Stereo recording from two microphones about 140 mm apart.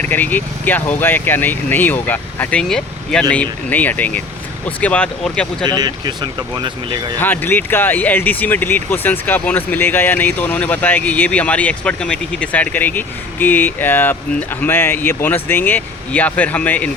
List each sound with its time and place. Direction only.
0.1 s speech: 10° left (ahead or behind)
5.6 s speech: 30° right (ahead or behind)
7.2 s speech: 15° left (ahead or behind)